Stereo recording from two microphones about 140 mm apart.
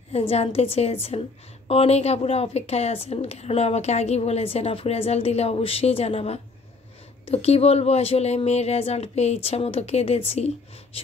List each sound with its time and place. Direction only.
0.1 s a woman's voice: 45° left (ahead or behind)